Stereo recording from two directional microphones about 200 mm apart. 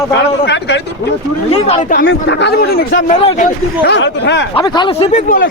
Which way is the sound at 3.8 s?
60° left (ahead or behind).